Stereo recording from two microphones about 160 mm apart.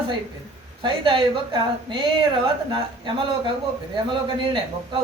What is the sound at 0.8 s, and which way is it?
Speech, 30° right (ahead or behind).